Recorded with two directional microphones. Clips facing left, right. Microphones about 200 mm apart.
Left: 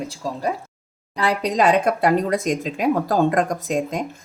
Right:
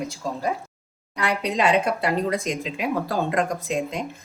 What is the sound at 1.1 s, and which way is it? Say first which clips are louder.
Speech: left 4 dB; 35° left (ahead or behind).